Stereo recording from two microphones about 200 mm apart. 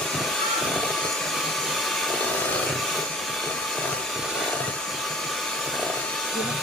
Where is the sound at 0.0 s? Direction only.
Centre (ahead or behind).